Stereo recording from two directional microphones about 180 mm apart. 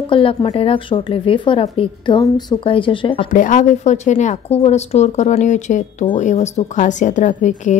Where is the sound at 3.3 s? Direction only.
45° left (ahead or behind).